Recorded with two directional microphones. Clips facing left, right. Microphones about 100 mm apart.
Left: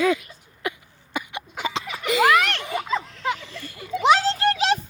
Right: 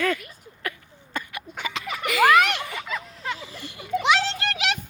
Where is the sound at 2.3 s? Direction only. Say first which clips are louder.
Right 4 dB; centre (ahead or behind).